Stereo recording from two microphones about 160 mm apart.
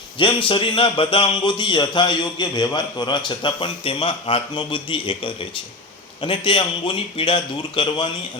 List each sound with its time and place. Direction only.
0.2 s speech: 30° left (ahead or behind)